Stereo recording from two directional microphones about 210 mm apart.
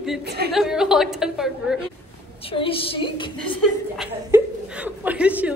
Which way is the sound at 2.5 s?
25° left (ahead or behind).